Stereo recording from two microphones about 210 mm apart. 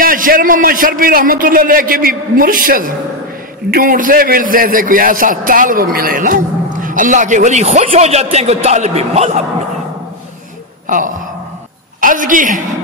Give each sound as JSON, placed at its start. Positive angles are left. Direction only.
{"t": 0.0, "sound": "a man's voice", "side_deg": -40}
{"t": 12.0, "sound": "a woman's voice", "side_deg": -40}